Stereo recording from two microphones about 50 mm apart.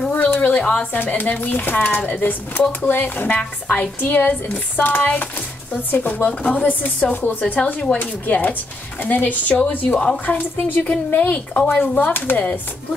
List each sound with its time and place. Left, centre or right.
0.1 s a sound: left
0.9 s speech: left
11.2 s speech: left
11.8 s speech: left
12.1 s speech: left